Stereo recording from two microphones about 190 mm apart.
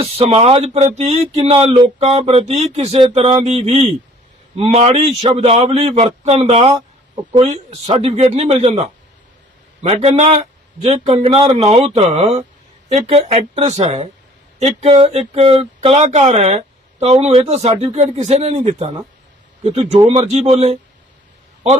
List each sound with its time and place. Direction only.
0.0 s speech: 30° right (ahead or behind)